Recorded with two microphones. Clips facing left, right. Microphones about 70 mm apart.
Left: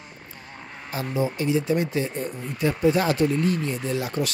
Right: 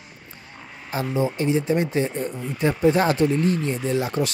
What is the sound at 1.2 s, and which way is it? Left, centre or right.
Speech, right.